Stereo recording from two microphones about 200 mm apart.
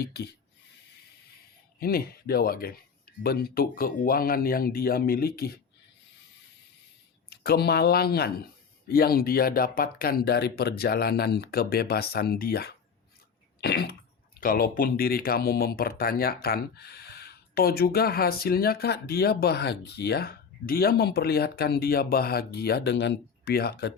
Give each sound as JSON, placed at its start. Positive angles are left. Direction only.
{"t": 0.0, "sound": "a sound", "side_deg": 55}
{"t": 1.8, "sound": "speech", "side_deg": 50}
{"t": 7.3, "sound": "speech", "side_deg": 50}
{"t": 13.6, "sound": "cough", "side_deg": 55}
{"t": 14.3, "sound": "speech", "side_deg": 45}